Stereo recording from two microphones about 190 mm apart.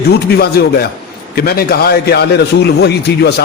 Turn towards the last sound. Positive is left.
turn(degrees=60)  # may be behind; listen again after turning